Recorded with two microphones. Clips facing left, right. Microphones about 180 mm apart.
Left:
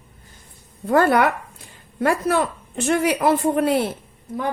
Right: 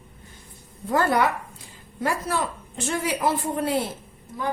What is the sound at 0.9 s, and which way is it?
Speech, 65° left (ahead or behind).